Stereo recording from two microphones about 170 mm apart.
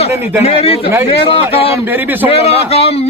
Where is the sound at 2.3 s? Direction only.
35° left (ahead or behind).